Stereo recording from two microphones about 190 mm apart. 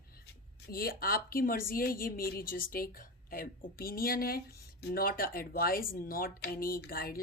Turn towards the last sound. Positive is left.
turn(degrees=50)  # may be behind; listen again after turning